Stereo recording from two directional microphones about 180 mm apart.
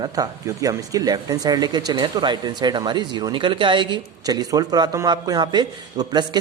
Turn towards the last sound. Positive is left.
turn(degrees=-20)  # may be behind; listen again after turning